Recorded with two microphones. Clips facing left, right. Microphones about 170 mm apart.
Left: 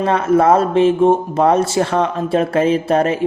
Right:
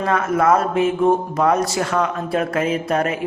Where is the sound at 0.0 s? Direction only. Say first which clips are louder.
Left 4 dB; 30° left (ahead or behind).